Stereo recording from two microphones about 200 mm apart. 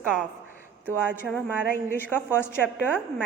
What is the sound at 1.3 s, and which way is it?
Speech, centre (ahead or behind).